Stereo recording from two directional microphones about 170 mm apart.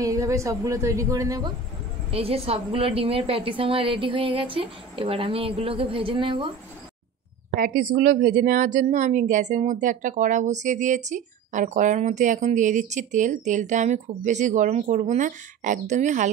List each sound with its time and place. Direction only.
0.0 s speech: 20° right (ahead or behind)
2.0 s a woman's voice: 35° right (ahead or behind)
7.5 s a woman's voice: 55° right (ahead or behind)